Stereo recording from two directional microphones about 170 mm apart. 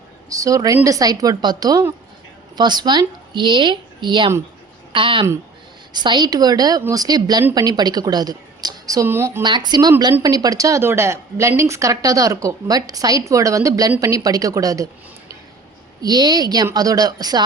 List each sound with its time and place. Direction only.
0.3 s a woman's voice: 20° right (ahead or behind)
9.4 s a woman's voice: 25° right (ahead or behind)
16.0 s a woman's voice: 25° right (ahead or behind)